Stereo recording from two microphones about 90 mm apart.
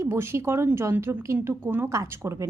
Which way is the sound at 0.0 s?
25° right (ahead or behind).